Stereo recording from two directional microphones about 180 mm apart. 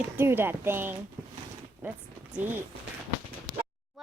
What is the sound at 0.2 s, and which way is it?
Speech, 10° right (ahead or behind).